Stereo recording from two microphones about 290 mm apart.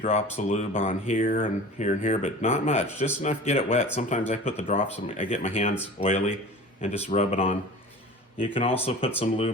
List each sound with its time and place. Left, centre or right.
0.0 s speech: left
8.8 s speech: centre